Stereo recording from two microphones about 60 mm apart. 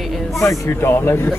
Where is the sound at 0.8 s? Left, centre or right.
Left.